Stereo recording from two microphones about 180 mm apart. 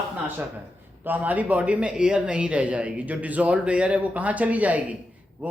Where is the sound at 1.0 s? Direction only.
10° right (ahead or behind).